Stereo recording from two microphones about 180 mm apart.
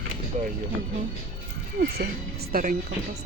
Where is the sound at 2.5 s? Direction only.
55° right (ahead or behind).